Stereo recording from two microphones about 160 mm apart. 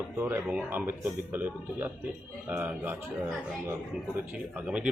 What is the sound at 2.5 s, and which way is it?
Speech, 10° right (ahead or behind).